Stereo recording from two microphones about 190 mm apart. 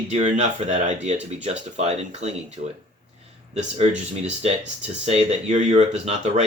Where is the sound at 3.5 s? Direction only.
35° right (ahead or behind).